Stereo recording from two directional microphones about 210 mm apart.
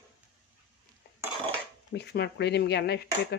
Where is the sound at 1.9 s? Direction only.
55° left (ahead or behind).